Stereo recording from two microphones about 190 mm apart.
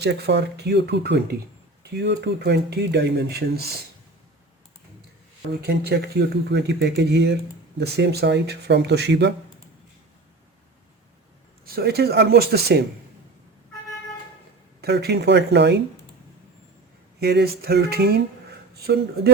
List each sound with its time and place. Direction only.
0.0 s speech: 60° right (ahead or behind)
5.6 s speech: 60° right (ahead or behind)
11.6 s speech: 55° right (ahead or behind)
14.8 s speech: 60° right (ahead or behind)
17.2 s speech: 60° right (ahead or behind)